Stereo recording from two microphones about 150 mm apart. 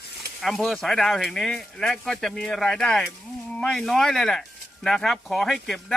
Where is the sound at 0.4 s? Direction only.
Centre (ahead or behind).